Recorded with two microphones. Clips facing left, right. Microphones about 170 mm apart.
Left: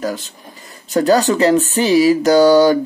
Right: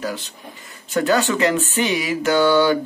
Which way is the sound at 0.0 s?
40° left (ahead or behind).